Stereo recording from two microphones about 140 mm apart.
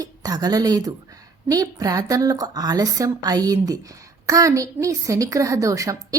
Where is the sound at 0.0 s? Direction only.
25° right (ahead or behind).